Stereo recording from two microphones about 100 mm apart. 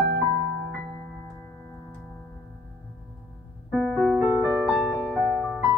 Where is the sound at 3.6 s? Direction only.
5° right (ahead or behind).